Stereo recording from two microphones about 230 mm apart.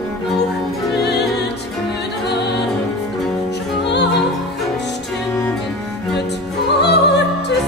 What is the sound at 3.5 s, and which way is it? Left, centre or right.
Music, left.